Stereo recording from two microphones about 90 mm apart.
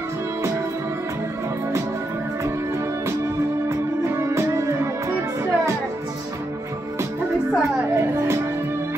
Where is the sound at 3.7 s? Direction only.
30° right (ahead or behind).